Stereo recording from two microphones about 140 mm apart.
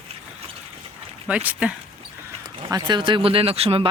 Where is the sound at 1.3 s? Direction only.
10° right (ahead or behind).